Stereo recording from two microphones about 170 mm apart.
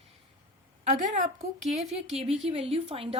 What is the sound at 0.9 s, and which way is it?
A woman's voice, 45° right (ahead or behind).